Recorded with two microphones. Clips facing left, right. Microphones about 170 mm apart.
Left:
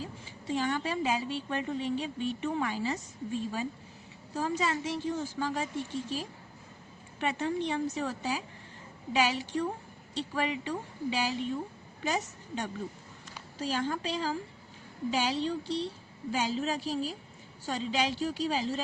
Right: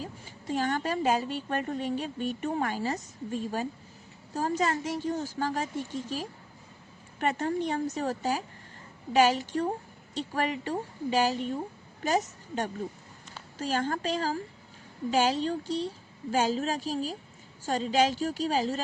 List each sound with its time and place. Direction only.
0.4 s a woman's voice: 50° right (ahead or behind)
7.2 s a woman's voice: 45° right (ahead or behind)